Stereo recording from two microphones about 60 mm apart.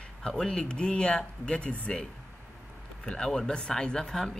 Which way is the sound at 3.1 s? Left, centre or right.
Centre.